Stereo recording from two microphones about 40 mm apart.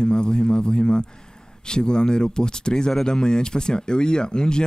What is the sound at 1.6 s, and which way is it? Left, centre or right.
Speech, left.